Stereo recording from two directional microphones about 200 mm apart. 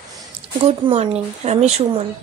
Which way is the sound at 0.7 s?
30° right (ahead or behind).